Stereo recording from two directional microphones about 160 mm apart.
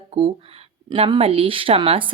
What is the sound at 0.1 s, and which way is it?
Speech, 40° right (ahead or behind).